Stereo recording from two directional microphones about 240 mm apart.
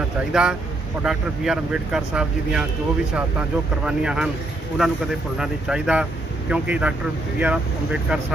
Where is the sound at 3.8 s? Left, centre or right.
Centre.